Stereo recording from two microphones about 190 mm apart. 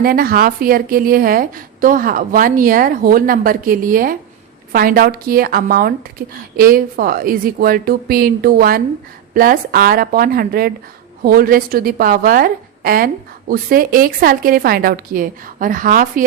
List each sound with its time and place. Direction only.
0.0 s a woman's voice: 50° right (ahead or behind)